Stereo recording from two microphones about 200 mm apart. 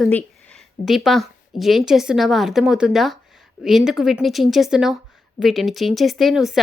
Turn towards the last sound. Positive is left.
turn(degrees=0)  # may be behind; listen again after turning